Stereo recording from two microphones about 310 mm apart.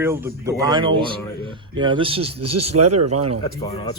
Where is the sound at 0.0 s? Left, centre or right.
Centre.